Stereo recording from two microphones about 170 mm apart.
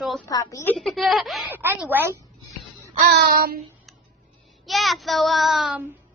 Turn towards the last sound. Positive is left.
turn(degrees=-5)  # may be behind; listen again after turning